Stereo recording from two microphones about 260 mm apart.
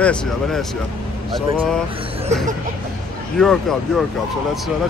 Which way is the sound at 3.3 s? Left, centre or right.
Centre.